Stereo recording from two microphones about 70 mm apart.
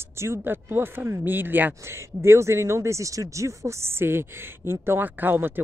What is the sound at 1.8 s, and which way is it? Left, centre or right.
Speech, right.